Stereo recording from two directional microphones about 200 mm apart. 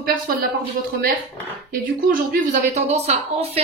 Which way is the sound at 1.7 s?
45° right (ahead or behind).